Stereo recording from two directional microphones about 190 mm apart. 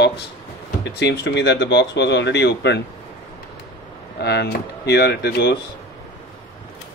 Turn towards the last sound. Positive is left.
turn(degrees=60)  # may be behind; listen again after turning